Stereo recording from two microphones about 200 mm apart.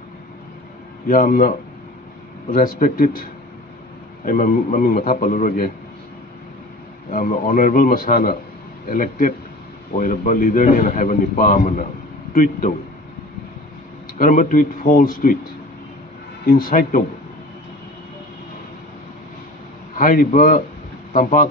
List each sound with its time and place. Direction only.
1.0 s speech: 45° left (ahead or behind)
2.5 s speech: 45° left (ahead or behind)
7.1 s a man's voice: 45° left (ahead or behind)
14.1 s speech: 40° left (ahead or behind)
16.4 s speech: 45° left (ahead or behind)
20.0 s speech: 45° left (ahead or behind)